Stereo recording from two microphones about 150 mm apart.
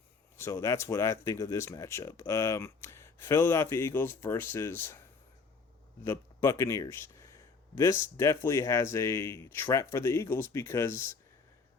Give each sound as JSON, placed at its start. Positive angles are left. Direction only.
{"t": 0.3, "sound": "speech", "side_deg": 20}
{"t": 6.1, "sound": "speech", "side_deg": 20}